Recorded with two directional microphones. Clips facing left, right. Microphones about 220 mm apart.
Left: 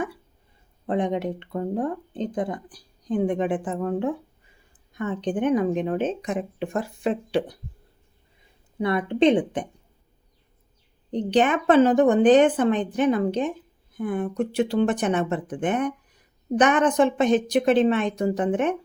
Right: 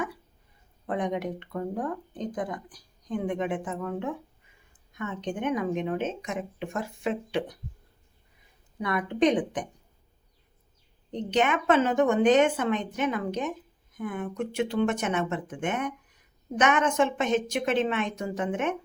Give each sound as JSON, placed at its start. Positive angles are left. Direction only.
{"t": 0.9, "sound": "speech", "side_deg": 30}
{"t": 8.8, "sound": "a woman's voice", "side_deg": 30}
{"t": 11.1, "sound": "speech", "side_deg": 35}